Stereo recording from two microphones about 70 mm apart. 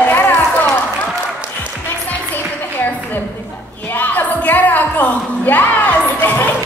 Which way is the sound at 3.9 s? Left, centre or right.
Left.